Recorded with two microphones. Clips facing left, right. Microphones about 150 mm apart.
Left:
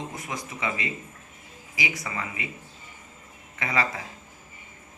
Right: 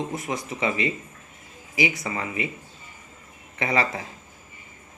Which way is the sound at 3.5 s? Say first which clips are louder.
Right 3 dB; 30° right (ahead or behind).